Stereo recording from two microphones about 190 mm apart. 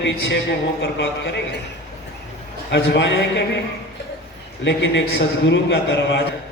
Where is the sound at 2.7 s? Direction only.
65° left (ahead or behind).